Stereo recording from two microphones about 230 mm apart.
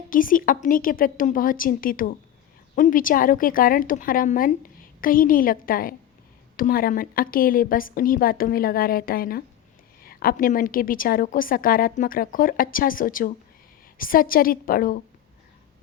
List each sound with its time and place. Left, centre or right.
0.1 s a woman's voice: left